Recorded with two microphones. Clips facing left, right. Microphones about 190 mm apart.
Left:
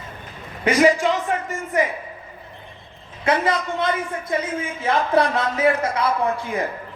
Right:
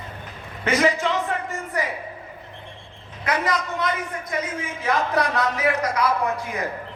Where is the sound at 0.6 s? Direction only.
15° left (ahead or behind).